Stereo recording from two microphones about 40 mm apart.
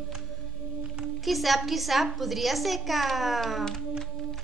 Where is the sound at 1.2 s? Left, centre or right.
Centre.